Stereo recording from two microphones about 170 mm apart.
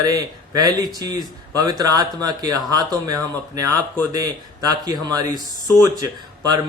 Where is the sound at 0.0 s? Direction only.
20° right (ahead or behind).